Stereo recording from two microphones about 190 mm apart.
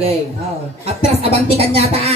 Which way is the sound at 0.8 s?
30° right (ahead or behind).